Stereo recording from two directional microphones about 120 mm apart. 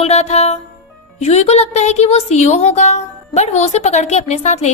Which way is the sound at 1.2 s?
60° left (ahead or behind).